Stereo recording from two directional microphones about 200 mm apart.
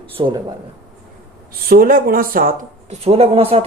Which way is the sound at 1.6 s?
45° right (ahead or behind).